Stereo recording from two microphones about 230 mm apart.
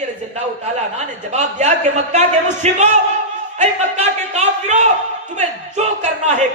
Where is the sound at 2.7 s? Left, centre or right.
Right.